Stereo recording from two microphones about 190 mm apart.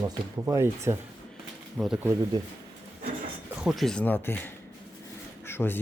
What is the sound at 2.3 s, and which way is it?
Speech, 20° right (ahead or behind).